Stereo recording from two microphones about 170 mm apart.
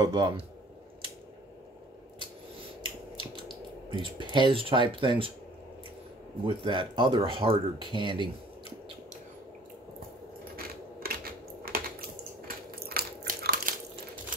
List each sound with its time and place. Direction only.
0.0 s speech: 25° right (ahead or behind)
3.9 s speech: 30° right (ahead or behind)
6.4 s speech: 30° right (ahead or behind)
10.5 s a sound: 60° right (ahead or behind)
11.7 s squish: 65° right (ahead or behind)
12.4 s crushing: 65° right (ahead or behind)